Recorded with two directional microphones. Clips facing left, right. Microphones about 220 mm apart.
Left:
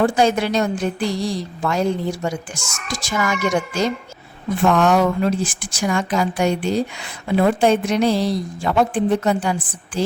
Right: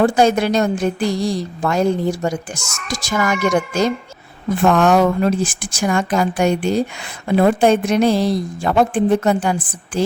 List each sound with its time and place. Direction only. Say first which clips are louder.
0.0 s a woman's voice: right 3 dB; 45° right (ahead or behind)